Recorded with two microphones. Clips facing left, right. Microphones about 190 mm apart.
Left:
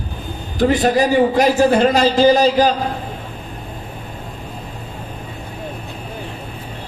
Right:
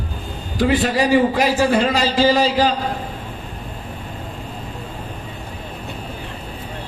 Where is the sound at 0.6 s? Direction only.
45° left (ahead or behind).